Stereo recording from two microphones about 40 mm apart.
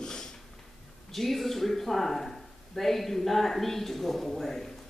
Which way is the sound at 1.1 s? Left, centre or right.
Centre.